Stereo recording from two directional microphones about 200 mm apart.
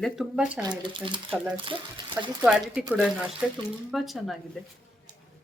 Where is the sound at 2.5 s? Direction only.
5° right (ahead or behind).